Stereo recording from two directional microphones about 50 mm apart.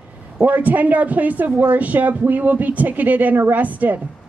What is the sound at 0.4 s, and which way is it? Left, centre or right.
A woman's voice, right.